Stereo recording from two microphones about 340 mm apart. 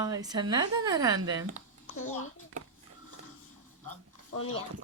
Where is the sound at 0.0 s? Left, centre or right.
Centre.